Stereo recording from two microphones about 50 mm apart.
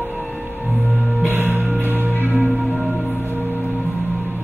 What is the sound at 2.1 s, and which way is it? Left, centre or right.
Music, left.